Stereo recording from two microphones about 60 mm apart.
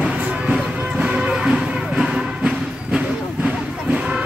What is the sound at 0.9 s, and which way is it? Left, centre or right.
Music, centre.